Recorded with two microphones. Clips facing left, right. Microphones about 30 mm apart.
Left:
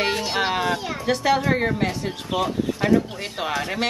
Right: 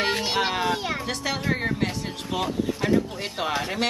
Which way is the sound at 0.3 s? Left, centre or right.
Centre.